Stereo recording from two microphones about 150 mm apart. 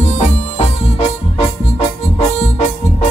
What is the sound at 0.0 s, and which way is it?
Music, 50° left (ahead or behind).